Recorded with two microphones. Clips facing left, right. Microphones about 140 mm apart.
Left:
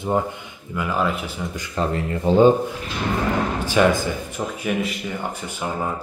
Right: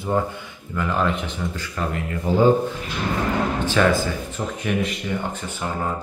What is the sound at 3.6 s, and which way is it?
Speech, 15° left (ahead or behind).